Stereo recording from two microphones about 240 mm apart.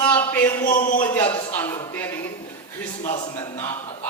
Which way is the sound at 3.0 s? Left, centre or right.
Left.